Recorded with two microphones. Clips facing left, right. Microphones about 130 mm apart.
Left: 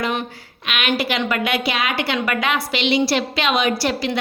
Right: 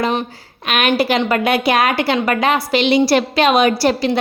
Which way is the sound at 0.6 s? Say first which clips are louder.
Right 6 dB; 45° right (ahead or behind).